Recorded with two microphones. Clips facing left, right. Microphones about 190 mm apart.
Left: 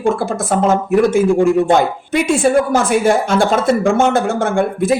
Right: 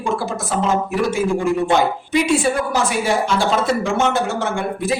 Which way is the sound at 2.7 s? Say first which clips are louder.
Left 6 dB; 50° left (ahead or behind).